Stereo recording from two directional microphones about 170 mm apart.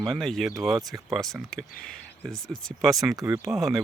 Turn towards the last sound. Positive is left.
turn(degrees=0)  # may be behind; listen again after turning